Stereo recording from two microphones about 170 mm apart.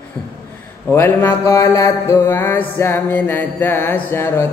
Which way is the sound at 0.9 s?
15° left (ahead or behind).